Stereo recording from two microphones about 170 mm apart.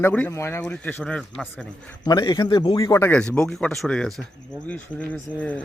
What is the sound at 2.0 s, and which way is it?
A man's voice, 25° left (ahead or behind).